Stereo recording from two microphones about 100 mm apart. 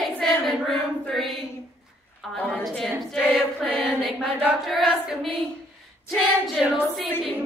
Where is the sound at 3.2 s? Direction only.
5° right (ahead or behind).